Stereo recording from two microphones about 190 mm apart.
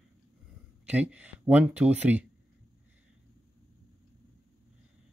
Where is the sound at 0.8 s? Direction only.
5° right (ahead or behind).